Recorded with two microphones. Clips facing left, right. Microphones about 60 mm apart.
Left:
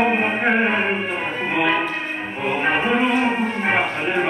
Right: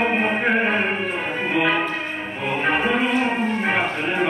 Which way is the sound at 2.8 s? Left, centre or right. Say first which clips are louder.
Left 2 dB; centre.